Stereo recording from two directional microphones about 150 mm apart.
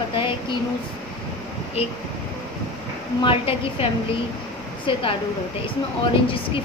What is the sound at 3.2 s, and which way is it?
Speech, 35° left (ahead or behind).